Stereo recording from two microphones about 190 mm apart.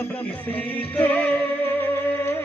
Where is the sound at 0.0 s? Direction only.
10° left (ahead or behind).